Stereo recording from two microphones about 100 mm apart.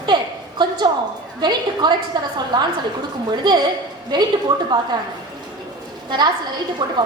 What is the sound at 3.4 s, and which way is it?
Speech, 45° right (ahead or behind).